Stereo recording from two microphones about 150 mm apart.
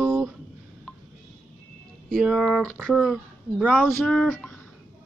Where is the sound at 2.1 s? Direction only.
Centre (ahead or behind).